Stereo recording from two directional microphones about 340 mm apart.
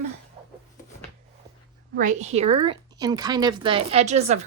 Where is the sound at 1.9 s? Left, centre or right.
Right.